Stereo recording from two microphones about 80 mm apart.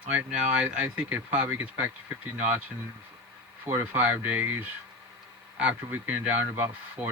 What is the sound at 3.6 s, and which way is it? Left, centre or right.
Speech, right.